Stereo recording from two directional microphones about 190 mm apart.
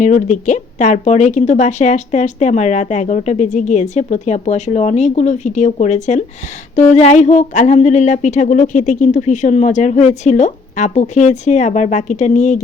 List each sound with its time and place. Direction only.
0.0 s speech: 40° left (ahead or behind)